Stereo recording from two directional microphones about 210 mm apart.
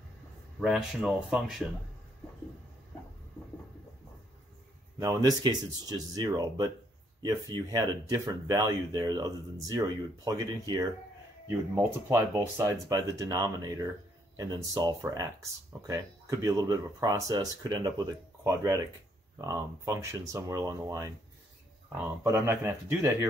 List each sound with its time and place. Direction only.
0.6 s speech: centre (ahead or behind)
4.9 s speech: 15° right (ahead or behind)